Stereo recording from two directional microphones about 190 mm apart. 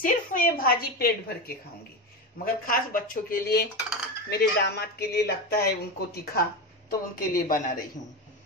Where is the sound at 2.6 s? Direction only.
50° left (ahead or behind).